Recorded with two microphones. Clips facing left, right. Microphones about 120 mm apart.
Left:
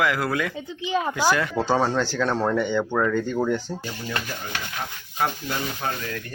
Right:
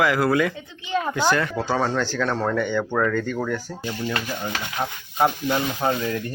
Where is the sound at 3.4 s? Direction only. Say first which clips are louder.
Left 3 dB; 25° left (ahead or behind).